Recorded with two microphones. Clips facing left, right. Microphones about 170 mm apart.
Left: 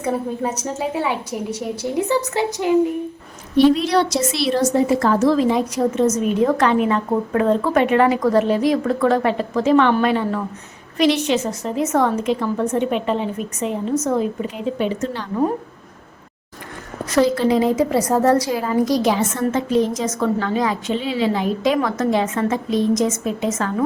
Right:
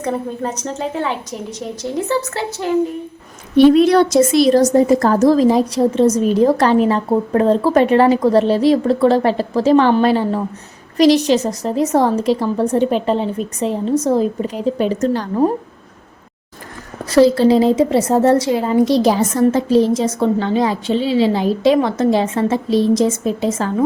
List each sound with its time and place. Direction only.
0.0 s a woman's voice: 10° left (ahead or behind)
3.6 s a woman's voice: 55° right (ahead or behind)
17.1 s a woman's voice: 30° right (ahead or behind)